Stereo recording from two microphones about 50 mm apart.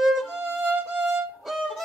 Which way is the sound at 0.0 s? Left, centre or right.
Centre.